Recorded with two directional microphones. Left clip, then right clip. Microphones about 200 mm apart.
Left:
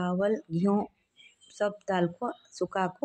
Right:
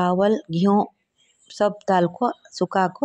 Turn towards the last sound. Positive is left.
turn(degrees=-25)  # may be behind; listen again after turning